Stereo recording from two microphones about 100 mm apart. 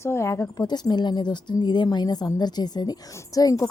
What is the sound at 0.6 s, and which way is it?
A woman's voice, 45° left (ahead or behind).